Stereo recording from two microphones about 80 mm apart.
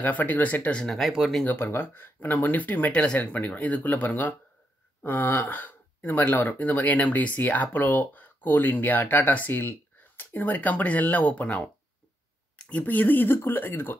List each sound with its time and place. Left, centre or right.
0.0 s speech: left; by 1.4 s centre
1.4 s speech: left